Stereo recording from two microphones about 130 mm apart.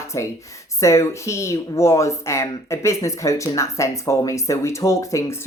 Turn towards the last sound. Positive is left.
turn(degrees=25)  # may be behind; listen again after turning